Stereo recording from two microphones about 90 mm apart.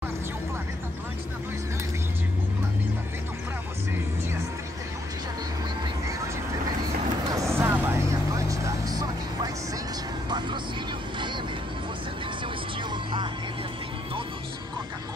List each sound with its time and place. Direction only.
7.2 s vehicle: 40° right (ahead or behind)
7.5 s vehicle: 25° right (ahead or behind)
8.5 s vehicle: 40° right (ahead or behind)